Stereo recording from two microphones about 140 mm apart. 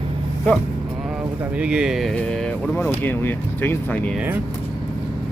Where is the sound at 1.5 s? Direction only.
5° right (ahead or behind); by 4.0 s 15° left (ahead or behind).